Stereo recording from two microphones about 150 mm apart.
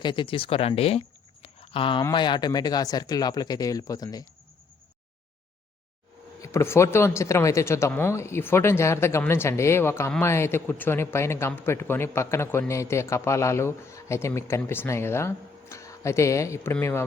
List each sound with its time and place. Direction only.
0.0 s speech: 30° left (ahead or behind)
6.4 s a man's voice: 20° left (ahead or behind)